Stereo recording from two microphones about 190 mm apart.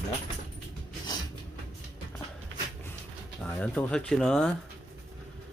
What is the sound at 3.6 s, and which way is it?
Speech, 10° left (ahead or behind).